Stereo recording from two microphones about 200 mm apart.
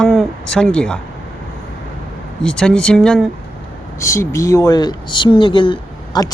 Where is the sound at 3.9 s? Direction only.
15° left (ahead or behind).